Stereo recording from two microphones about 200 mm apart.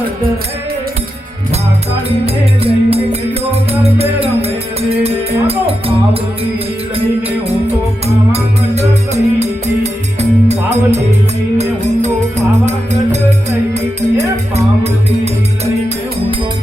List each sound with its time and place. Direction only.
2.2 s music: 30° right (ahead or behind)
8.0 s music: 30° right (ahead or behind)